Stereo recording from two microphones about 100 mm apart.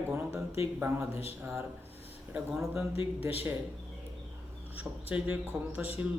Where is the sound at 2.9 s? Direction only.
80° left.